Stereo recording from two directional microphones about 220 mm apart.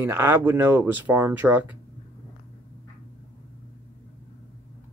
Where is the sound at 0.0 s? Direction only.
10° right (ahead or behind).